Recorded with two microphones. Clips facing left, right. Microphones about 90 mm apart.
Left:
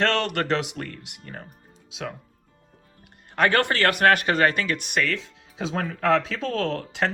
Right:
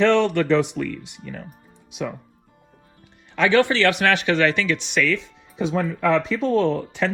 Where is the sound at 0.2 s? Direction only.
65° left (ahead or behind).